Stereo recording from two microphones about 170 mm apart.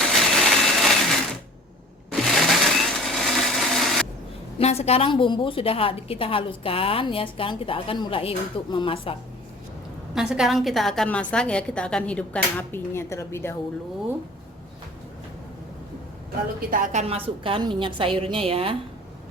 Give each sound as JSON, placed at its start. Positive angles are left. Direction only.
{"t": 0.0, "sound": "a sound", "side_deg": 0}
{"t": 2.1, "sound": "blender", "side_deg": 0}
{"t": 4.5, "sound": "a woman's voice", "side_deg": 40}
{"t": 10.2, "sound": "a woman's voice", "side_deg": -5}
{"t": 16.7, "sound": "a woman's voice", "side_deg": -50}